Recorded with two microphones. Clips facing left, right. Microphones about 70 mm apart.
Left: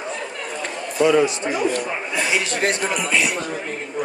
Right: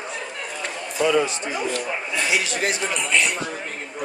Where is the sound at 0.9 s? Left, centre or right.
Centre.